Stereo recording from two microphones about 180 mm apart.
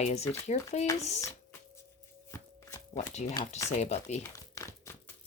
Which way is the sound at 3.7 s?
40° left (ahead or behind).